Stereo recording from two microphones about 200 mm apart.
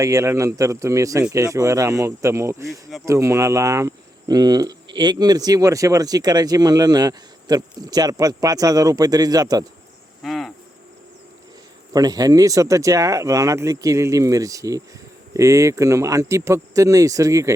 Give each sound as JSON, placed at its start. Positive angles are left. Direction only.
{"t": 0.0, "sound": "speech", "side_deg": -15}
{"t": 2.6, "sound": "speech", "side_deg": 0}
{"t": 3.1, "sound": "speech", "side_deg": -15}
{"t": 10.2, "sound": "cricket", "side_deg": 0}
{"t": 11.9, "sound": "speech", "side_deg": -20}